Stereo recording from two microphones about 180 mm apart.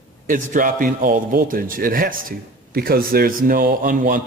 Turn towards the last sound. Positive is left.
turn(degrees=-50)  # may be behind; listen again after turning